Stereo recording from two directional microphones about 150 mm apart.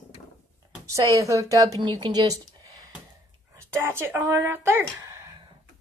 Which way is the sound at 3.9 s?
15° right (ahead or behind).